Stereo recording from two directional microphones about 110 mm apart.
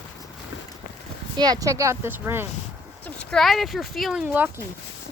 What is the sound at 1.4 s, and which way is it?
Speech, 35° right (ahead or behind).